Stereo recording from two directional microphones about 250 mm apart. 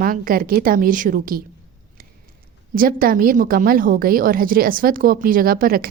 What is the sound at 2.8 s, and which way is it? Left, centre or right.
A woman's voice, right.